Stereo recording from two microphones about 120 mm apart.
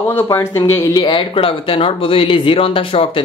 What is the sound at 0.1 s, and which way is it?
Speech, 20° left (ahead or behind).